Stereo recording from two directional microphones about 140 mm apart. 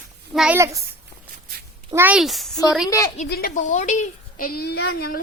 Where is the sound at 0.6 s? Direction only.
20° right (ahead or behind).